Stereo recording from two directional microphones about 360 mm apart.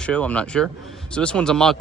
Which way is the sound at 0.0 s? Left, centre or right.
Centre.